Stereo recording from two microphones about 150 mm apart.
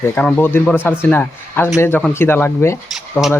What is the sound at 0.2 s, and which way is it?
A man's voice, 10° left (ahead or behind).